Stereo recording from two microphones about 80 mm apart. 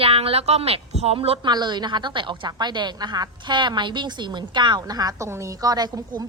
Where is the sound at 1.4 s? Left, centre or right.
Right.